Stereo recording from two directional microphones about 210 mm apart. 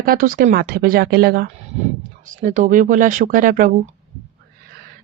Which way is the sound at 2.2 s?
35° right (ahead or behind).